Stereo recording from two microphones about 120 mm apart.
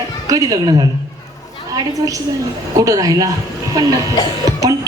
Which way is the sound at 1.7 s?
30° right (ahead or behind).